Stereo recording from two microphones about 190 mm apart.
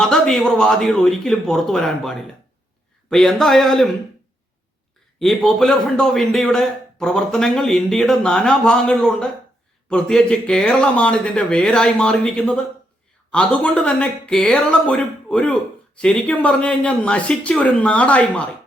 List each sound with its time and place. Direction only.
0.0 s speech: centre (ahead or behind)
5.2 s speech: centre (ahead or behind)